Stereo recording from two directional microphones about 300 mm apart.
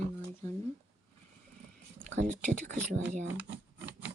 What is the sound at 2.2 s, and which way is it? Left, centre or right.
Speech, right.